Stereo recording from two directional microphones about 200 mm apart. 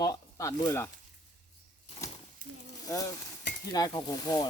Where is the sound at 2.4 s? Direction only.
45° right (ahead or behind).